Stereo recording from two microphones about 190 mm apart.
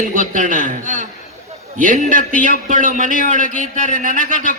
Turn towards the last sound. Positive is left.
turn(degrees=-45)  # may be behind; listen again after turning